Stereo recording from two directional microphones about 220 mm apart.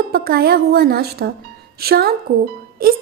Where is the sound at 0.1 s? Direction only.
45° right (ahead or behind).